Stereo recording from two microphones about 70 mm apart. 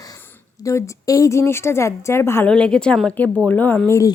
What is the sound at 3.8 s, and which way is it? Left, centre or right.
Speech, left.